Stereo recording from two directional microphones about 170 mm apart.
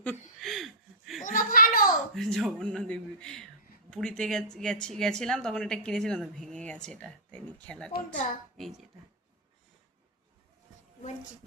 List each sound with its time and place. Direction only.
0.0 s chuckle: 5° left (ahead or behind)
1.2 s a sound: 50° left (ahead or behind)
2.1 s speech: centre (ahead or behind)
7.9 s a child's voice: 50° left (ahead or behind)